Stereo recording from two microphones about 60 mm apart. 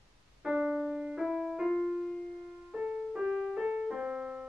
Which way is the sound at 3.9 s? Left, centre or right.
Centre.